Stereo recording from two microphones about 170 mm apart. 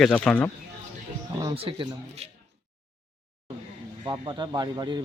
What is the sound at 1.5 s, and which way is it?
Speech, 35° right (ahead or behind).